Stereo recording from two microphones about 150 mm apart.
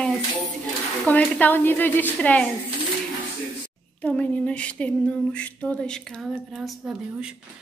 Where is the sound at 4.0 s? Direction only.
10° left (ahead or behind).